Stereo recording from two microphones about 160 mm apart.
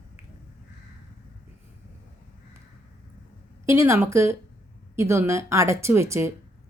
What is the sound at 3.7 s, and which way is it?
A woman's voice, 15° right (ahead or behind).